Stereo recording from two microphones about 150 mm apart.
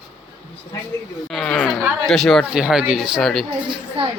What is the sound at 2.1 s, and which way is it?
Speech, centre (ahead or behind).